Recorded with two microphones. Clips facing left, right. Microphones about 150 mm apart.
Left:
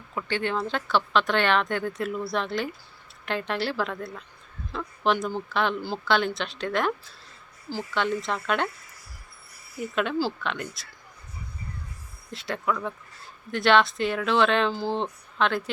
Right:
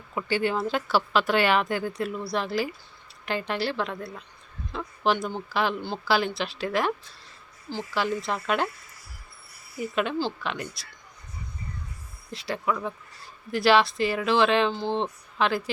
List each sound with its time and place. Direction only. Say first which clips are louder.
0.1 s a woman's voice: right 2 dB; 10° right (ahead or behind)
7.9 s speech: even; 5° right (ahead or behind)
9.7 s speech: even; centre (ahead or behind)
12.3 s speech: even; centre (ahead or behind)